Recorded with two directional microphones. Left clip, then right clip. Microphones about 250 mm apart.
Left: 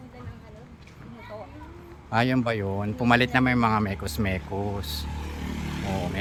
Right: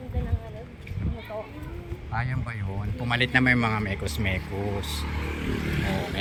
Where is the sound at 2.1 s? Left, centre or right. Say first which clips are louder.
Left 9 dB; left.